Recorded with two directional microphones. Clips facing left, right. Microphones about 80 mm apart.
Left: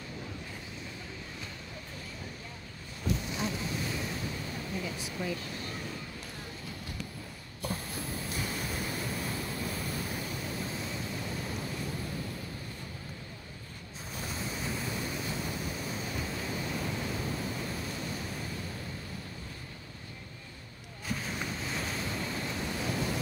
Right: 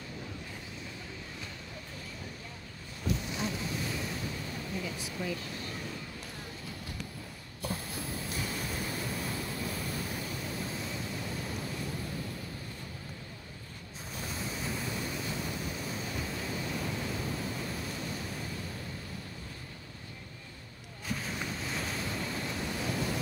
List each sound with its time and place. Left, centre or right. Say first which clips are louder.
3.4 s waves: even; centre
4.8 s waterfall: left 1 dB; left
7.6 s hiss: left 1 dB; centre
8.4 s waves: left 1 dB; centre
14.2 s waves: left 1 dB; centre
16.5 s pink noise: left 1 dB; centre
21.1 s a sound: left 1 dB; centre
21.5 s waves: even; centre